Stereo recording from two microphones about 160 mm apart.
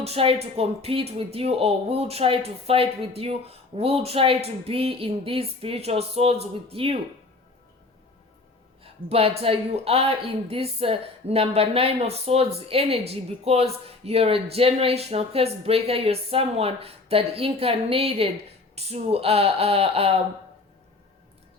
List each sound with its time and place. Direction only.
0.0 s speech: 40° right (ahead or behind)
8.8 s speech: 35° right (ahead or behind)